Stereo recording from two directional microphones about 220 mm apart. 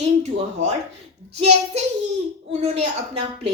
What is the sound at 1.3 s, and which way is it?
A woman's voice, 30° right (ahead or behind).